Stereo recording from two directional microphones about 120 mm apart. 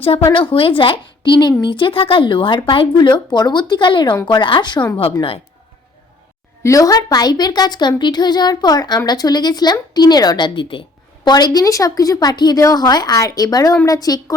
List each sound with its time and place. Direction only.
0.5 s a woman's voice: 45° left (ahead or behind)
6.6 s a woman's voice: 30° left (ahead or behind)